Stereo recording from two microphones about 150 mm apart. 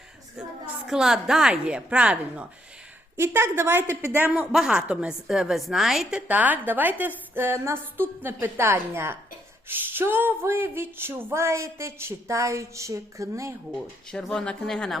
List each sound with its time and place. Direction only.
0.3 s a woman's voice: 5° right (ahead or behind)
13.7 s speech: 5° left (ahead or behind)